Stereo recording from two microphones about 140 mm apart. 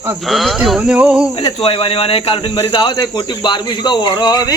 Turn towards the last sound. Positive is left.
turn(degrees=30)  # may be behind; listen again after turning